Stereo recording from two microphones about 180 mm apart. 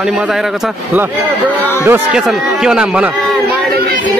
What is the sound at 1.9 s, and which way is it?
Speech, 5° right (ahead or behind).